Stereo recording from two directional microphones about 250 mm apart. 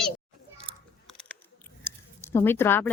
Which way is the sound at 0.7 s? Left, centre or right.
Right.